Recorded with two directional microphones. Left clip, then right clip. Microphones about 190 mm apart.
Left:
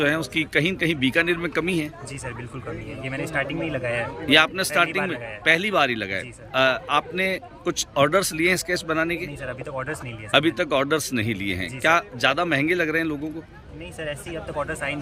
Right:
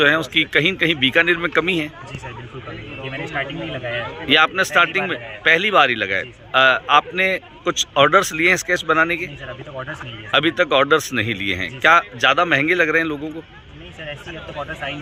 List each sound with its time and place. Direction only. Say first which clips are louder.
0.0 s a man's voice: right 7 dB; 10° left (ahead or behind)
3.1 s a man's voice: right 1 dB; 15° left (ahead or behind)
9.7 s a man's voice: even; 25° left (ahead or behind)
10.3 s a man's voice: right 4 dB; 10° left (ahead or behind)